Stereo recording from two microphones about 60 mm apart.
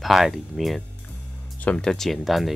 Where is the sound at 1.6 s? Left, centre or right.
Left.